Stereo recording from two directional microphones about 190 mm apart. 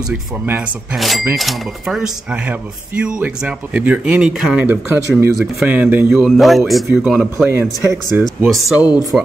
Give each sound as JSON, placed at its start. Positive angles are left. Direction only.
{"t": 0.1, "sound": "a man's voice", "side_deg": -5}